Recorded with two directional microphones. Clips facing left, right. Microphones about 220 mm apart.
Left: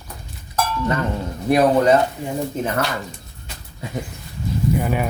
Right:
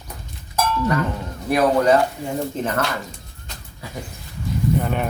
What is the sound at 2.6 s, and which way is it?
Speech, 5° left (ahead or behind).